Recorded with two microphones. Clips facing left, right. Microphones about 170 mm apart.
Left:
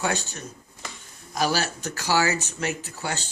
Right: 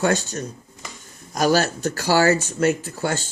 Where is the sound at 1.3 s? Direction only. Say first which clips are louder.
Right 6 dB; 45° right (ahead or behind).